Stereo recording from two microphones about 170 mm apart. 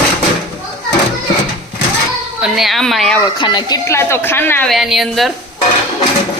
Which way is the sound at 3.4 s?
25° left (ahead or behind).